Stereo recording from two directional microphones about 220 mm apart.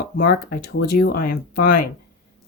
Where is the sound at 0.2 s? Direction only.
45° left (ahead or behind).